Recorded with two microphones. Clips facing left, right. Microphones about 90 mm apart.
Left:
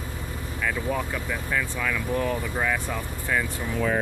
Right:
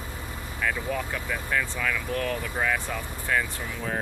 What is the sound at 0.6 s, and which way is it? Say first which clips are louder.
Speech: left 1 dB; centre (ahead or behind).